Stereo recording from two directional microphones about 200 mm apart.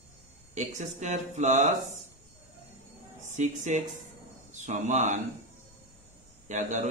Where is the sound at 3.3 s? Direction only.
35° right (ahead or behind).